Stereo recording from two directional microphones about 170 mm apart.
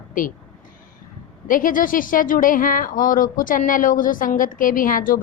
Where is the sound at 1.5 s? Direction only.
55° left (ahead or behind).